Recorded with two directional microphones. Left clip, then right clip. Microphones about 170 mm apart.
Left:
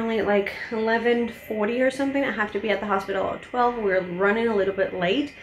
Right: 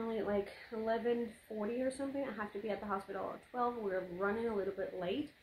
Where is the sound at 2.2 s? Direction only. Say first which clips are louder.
Left 16 dB; 10° right (ahead or behind).